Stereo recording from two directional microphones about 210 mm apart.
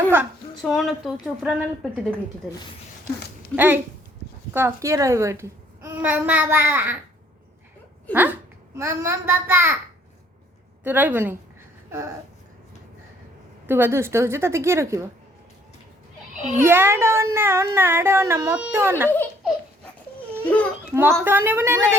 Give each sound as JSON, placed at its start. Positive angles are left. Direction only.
{"t": 0.6, "sound": "a woman's voice", "side_deg": 0}
{"t": 3.5, "sound": "speech", "side_deg": -10}
{"t": 8.1, "sound": "a child's voice", "side_deg": -10}
{"t": 10.8, "sound": "speech", "side_deg": -10}
{"t": 13.7, "sound": "speech", "side_deg": -10}
{"t": 16.3, "sound": "a sound", "side_deg": -35}
{"t": 16.6, "sound": "speech", "side_deg": -10}
{"t": 20.4, "sound": "speech", "side_deg": 5}
{"t": 20.9, "sound": "speech", "side_deg": -10}